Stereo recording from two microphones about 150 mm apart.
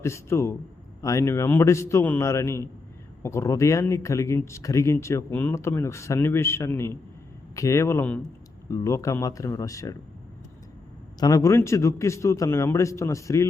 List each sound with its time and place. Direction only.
0.0 s speech: 20° left (ahead or behind)
11.2 s speech: 20° left (ahead or behind)